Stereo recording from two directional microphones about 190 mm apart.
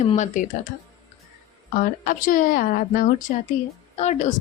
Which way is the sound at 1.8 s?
45° left (ahead or behind).